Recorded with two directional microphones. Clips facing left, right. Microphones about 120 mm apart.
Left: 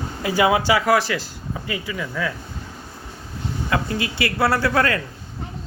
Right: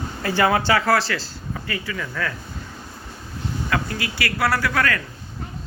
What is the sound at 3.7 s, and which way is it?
A man's voice, 25° left (ahead or behind).